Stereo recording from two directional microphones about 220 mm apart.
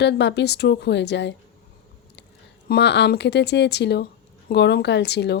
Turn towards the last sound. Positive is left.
turn(degrees=50)  # may be behind; listen again after turning